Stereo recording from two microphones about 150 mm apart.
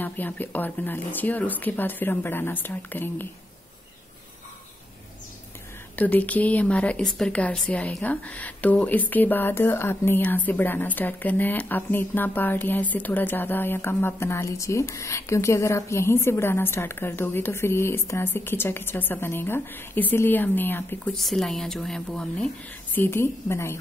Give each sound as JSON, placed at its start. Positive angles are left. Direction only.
{"t": 0.0, "sound": "a woman's voice", "side_deg": 10}
{"t": 5.9, "sound": "a woman's voice", "side_deg": 10}
{"t": 21.2, "sound": "a woman's voice", "side_deg": 0}
{"t": 22.9, "sound": "a woman's voice", "side_deg": 15}